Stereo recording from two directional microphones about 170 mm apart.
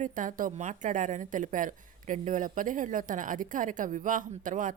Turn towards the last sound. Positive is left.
turn(degrees=-50)  # may be behind; listen again after turning